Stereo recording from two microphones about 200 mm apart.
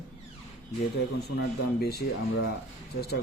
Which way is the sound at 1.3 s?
55° left (ahead or behind).